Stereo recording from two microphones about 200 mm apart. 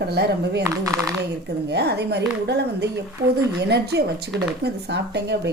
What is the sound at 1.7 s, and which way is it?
Speech, 55° right (ahead or behind).